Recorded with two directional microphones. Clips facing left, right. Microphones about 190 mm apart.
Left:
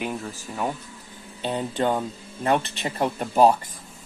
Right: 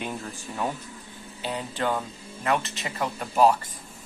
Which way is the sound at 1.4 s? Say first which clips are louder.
Left 4 dB; 25° left (ahead or behind).